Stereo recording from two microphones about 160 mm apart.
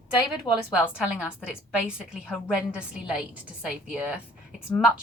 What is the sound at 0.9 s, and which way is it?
A woman's voice, 5° right (ahead or behind).